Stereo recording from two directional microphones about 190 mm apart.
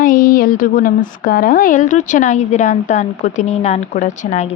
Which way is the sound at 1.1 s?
50° left (ahead or behind).